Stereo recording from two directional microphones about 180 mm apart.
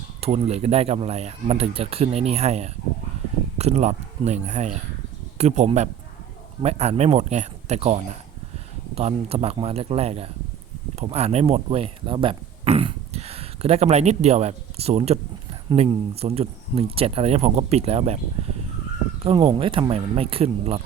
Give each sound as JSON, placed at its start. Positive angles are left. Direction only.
{"t": 0.2, "sound": "speech", "side_deg": -35}